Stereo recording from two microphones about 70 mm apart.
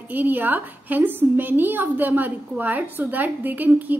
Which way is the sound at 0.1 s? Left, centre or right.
Right.